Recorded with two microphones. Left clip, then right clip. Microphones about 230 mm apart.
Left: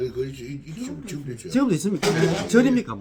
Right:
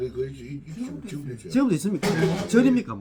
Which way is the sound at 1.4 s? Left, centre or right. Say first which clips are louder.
Left 1 dB; centre.